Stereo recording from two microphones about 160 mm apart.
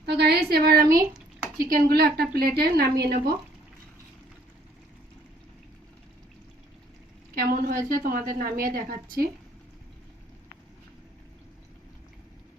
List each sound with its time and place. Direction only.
0.0 s a woman's voice: 90° right; by 3.3 s 70° right (ahead or behind)
7.3 s a woman's voice: 60° right (ahead or behind)